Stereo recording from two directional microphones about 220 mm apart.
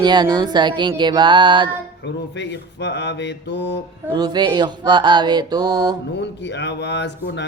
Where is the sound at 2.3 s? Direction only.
50° left (ahead or behind).